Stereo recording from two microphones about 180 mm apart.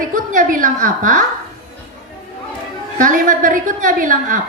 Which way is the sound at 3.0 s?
45° right (ahead or behind).